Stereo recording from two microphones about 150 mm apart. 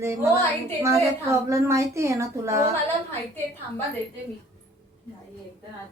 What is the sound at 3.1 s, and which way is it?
Speech, 15° left (ahead or behind).